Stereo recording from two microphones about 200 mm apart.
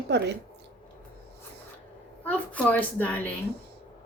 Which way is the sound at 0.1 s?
60° right (ahead or behind).